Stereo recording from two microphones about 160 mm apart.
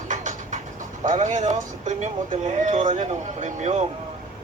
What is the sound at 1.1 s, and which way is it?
Speech, 50° right (ahead or behind).